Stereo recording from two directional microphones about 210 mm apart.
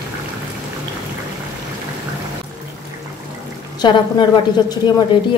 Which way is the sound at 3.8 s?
20° left (ahead or behind).